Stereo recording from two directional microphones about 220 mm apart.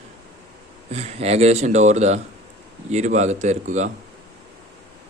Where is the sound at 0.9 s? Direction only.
30° right (ahead or behind).